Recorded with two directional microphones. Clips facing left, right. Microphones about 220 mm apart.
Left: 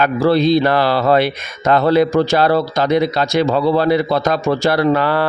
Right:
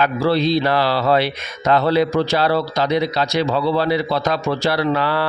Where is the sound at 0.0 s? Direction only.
50° left (ahead or behind).